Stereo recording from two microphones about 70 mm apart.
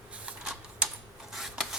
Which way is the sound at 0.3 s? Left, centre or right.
Centre.